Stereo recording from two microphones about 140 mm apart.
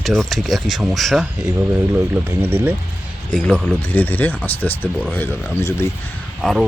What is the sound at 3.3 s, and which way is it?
Speech, 5° left (ahead or behind).